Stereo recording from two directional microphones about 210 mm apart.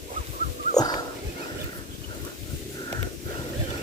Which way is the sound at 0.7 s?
20° left (ahead or behind).